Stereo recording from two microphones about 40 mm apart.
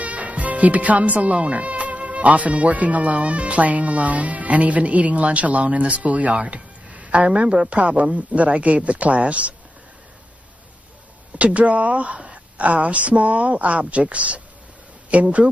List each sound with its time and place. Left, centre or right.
0.0 s speech: right
6.5 s a sound: right
7.2 s a woman's voice: right
11.3 s speech: right